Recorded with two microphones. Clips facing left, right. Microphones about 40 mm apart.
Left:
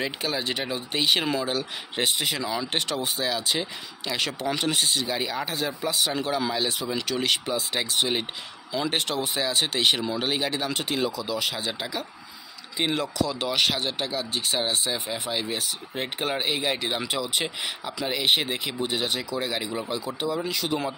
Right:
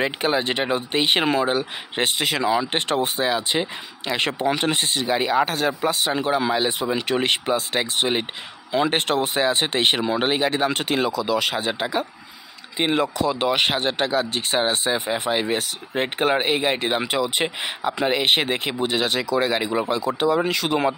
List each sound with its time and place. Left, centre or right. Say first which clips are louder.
0.0 s speech: right 7 dB; right
2.9 s speech: right 6 dB; right
5.4 s speech: right 7 dB; right
6.0 s speech: right 5 dB; right
8.7 s speech: right 6 dB; right
18.9 s speech: right 8 dB; right
19.5 s speech: right 7 dB; right